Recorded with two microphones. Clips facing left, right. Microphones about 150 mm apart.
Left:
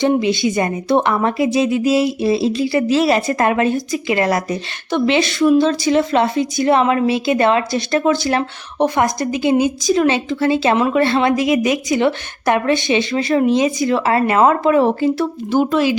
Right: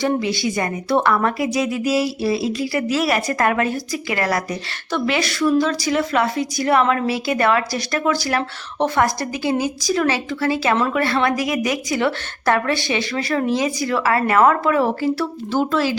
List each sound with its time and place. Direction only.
0.0 s a woman's voice: 20° left (ahead or behind)